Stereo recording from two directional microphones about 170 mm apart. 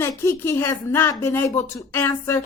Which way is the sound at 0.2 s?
15° left (ahead or behind).